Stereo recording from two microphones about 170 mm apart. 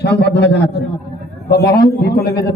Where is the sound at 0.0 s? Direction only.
80° left.